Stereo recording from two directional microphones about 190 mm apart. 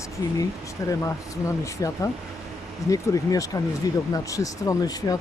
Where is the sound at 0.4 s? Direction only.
15° left (ahead or behind).